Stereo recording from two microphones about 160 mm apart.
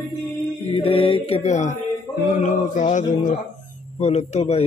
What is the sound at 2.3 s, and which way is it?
Mantra, 50° left (ahead or behind).